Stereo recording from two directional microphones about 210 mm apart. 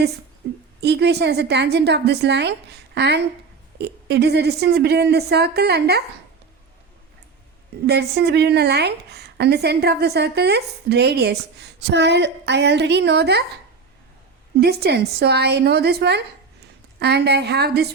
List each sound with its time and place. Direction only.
0.4 s a sound: 50° right (ahead or behind)
0.8 s a woman's voice: 50° right (ahead or behind)
7.9 s a woman's voice: 50° right (ahead or behind)
14.6 s a woman's voice: 50° right (ahead or behind)